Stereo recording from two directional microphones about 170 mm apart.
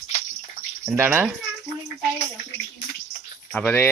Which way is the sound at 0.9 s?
15° right (ahead or behind).